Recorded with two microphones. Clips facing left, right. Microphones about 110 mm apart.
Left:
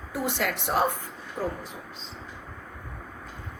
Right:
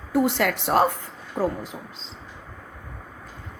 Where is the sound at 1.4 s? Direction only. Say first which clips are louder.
Right 6 dB; 40° right (ahead or behind).